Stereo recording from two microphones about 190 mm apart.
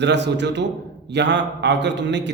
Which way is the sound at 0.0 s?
65° right (ahead or behind).